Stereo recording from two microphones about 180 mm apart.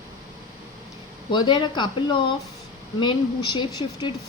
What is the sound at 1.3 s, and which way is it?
Speech, 25° left (ahead or behind).